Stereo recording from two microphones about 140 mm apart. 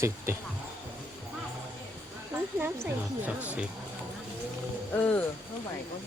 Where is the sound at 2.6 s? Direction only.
15° right (ahead or behind).